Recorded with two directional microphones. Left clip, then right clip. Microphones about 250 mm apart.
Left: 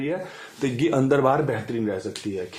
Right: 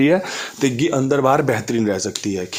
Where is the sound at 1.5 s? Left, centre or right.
Right.